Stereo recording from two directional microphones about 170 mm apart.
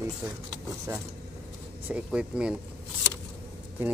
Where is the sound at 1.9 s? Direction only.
5° right (ahead or behind).